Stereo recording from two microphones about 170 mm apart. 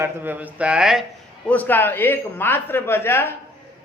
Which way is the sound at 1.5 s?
10° left (ahead or behind).